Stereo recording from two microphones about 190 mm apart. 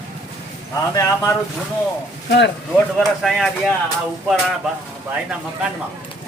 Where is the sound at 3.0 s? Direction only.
Centre (ahead or behind).